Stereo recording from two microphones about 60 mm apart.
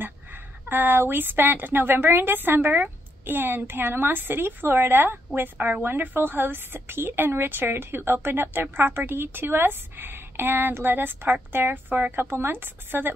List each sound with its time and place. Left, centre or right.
0.0 s speech: right